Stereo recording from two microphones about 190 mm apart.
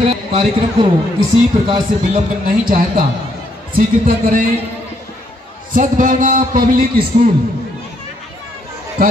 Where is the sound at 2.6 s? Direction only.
45° right (ahead or behind).